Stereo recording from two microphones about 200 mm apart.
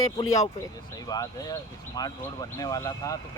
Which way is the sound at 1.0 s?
20° left (ahead or behind).